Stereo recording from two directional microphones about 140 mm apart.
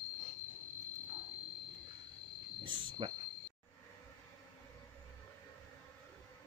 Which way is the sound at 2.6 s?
35° right (ahead or behind).